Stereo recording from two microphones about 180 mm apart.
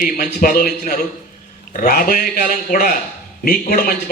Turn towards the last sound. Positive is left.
turn(degrees=55)  # may be behind; listen again after turning